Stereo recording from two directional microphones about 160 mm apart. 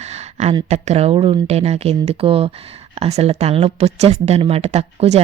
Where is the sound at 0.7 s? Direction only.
40° right (ahead or behind).